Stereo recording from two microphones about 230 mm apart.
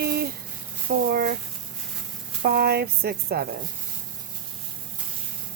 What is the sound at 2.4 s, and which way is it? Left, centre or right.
Speech, right.